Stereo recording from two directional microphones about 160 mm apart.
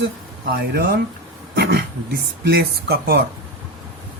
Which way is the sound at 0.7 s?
70° right (ahead or behind).